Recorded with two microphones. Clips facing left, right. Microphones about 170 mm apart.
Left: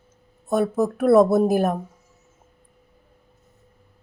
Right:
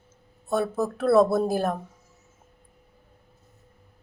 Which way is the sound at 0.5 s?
15° left (ahead or behind).